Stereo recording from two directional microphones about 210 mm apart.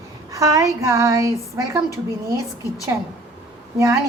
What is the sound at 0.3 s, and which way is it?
Speech, 15° right (ahead or behind).